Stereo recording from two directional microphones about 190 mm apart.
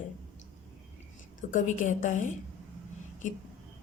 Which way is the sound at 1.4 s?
45° left (ahead or behind).